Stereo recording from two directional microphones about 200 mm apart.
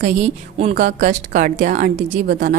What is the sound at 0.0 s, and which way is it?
A woman's voice, 35° right (ahead or behind).